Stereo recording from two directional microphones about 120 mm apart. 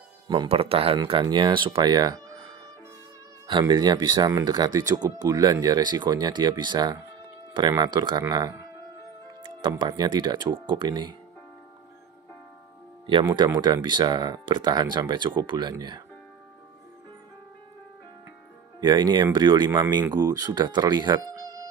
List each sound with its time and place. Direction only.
0.5 s speech: 55° right (ahead or behind)
1.2 s speech: 40° right (ahead or behind)
8.2 s speech: 30° right (ahead or behind)
9.4 s speech: 40° right (ahead or behind)
13.0 s speech: 45° right (ahead or behind)
18.8 s speech: 40° right (ahead or behind)